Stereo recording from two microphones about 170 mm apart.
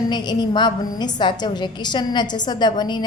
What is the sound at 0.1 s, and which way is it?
A woman's voice, 25° left (ahead or behind).